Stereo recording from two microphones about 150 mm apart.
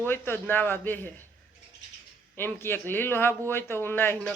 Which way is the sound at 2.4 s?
15° left (ahead or behind).